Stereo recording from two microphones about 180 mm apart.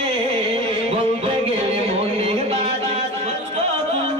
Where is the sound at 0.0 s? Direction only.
35° right (ahead or behind).